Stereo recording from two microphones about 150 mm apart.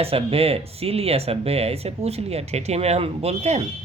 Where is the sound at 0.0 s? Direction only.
40° right (ahead or behind).